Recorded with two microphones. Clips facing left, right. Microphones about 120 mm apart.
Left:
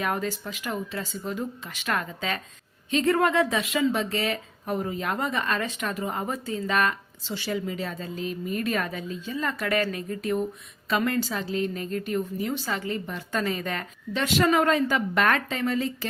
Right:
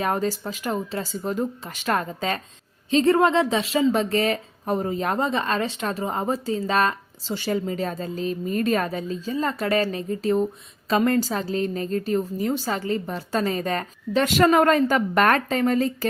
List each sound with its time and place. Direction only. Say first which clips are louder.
0.0 s a woman's voice: right 4 dB; 35° right (ahead or behind)